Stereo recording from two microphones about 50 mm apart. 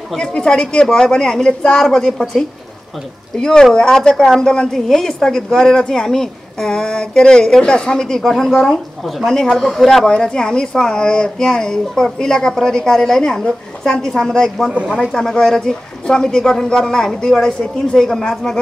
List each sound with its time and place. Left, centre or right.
0.2 s a woman's voice: centre
10.0 s a woman's voice: centre